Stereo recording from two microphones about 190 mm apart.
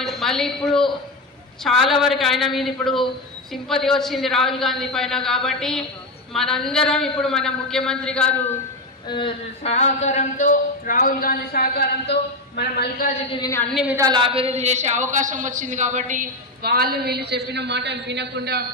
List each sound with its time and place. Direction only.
0.0 s a woman's voice: centre (ahead or behind)
9.1 s speech: 30° left (ahead or behind); by 13.1 s 55° left (ahead or behind)
13.4 s a woman's voice: 15° left (ahead or behind)
13.9 s a man's voice: 20° right (ahead or behind); by 18.7 s 55° right (ahead or behind)